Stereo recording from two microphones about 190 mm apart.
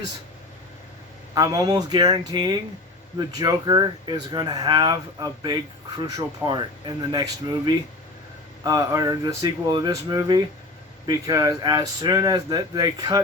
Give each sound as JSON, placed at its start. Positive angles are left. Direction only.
{"t": 1.3, "sound": "speech", "side_deg": -20}